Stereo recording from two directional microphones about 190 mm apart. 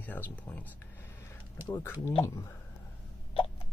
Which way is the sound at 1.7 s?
15° left (ahead or behind).